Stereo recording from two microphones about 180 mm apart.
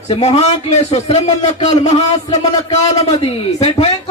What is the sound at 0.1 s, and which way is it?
Speech, 35° left (ahead or behind).